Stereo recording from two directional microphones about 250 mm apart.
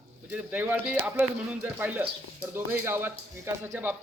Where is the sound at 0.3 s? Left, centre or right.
Centre.